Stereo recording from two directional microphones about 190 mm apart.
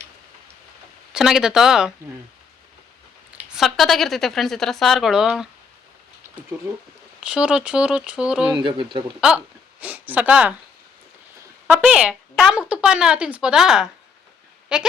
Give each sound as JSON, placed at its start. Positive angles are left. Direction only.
{"t": 1.1, "sound": "speech", "side_deg": -5}
{"t": 3.5, "sound": "speech", "side_deg": 0}
{"t": 7.2, "sound": "speech", "side_deg": -5}
{"t": 8.5, "sound": "speech", "side_deg": -25}
{"t": 9.8, "sound": "speech", "side_deg": -10}
{"t": 11.7, "sound": "speech", "side_deg": -5}